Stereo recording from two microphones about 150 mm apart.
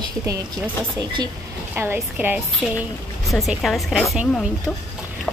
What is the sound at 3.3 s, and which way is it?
Speech, centre (ahead or behind).